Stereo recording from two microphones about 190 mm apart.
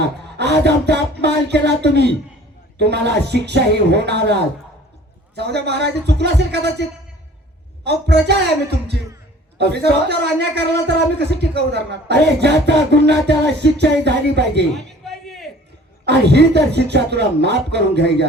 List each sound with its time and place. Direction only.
0.3 s a man's voice: 60° right (ahead or behind)
5.4 s a man's voice: 60° right (ahead or behind)
7.9 s a man's voice: 60° right (ahead or behind)
14.8 s a sound: centre (ahead or behind)
16.0 s a man's voice: 60° right (ahead or behind)